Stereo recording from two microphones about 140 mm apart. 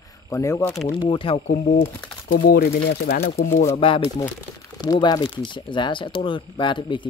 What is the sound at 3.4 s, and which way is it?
Speech, 75° left (ahead or behind).